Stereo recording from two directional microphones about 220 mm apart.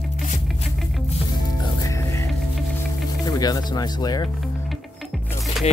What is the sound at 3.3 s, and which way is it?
Speech, 15° left (ahead or behind).